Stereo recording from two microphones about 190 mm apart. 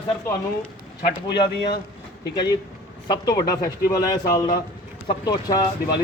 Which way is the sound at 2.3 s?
20° left (ahead or behind).